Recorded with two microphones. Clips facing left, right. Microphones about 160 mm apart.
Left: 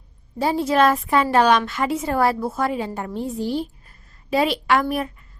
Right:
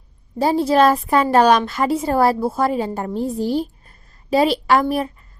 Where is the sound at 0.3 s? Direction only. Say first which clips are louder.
Right 3 dB; 35° right (ahead or behind).